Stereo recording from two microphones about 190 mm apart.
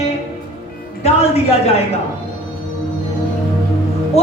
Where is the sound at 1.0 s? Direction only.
35° left (ahead or behind).